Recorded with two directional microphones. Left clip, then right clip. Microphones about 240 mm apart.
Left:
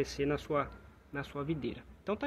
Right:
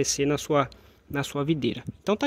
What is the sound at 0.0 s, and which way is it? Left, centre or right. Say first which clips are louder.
Speech: right 8 dB; right.